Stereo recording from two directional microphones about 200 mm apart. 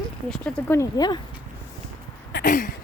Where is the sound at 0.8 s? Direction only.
20° left (ahead or behind).